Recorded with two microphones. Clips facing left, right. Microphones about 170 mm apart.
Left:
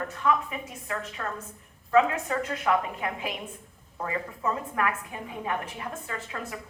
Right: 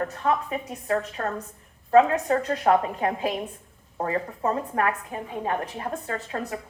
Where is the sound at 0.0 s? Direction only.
35° right (ahead or behind).